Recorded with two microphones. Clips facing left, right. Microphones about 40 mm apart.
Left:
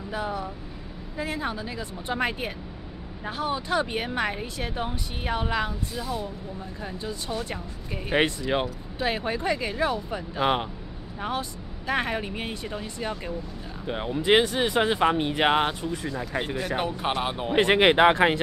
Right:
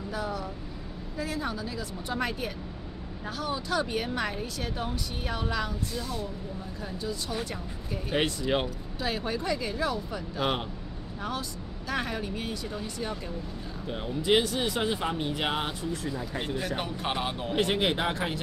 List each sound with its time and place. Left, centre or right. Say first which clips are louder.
0.1 s speech: left 4 dB; left
5.9 s speech: left 5 dB; centre
6.8 s speech: even; left
8.4 s speech: left 2 dB; centre
9.0 s speech: left 4 dB; left
15.8 s speech: left 2 dB; centre
16.5 s speech: left 4 dB; centre
17.5 s speech: left 7 dB; left
17.7 s speech: left 10 dB; left